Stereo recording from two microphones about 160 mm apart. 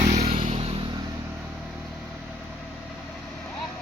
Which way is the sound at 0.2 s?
35° right (ahead or behind).